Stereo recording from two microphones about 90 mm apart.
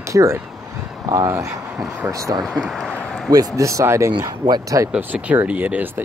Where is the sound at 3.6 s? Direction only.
35° right (ahead or behind).